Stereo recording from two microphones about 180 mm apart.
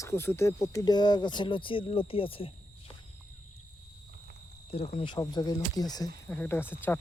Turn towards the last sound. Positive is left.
turn(degrees=10)  # may be behind; listen again after turning